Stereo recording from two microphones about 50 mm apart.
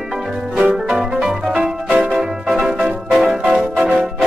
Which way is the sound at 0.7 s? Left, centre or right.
Centre.